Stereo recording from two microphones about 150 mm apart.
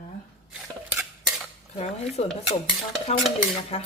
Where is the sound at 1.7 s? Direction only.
45° left (ahead or behind).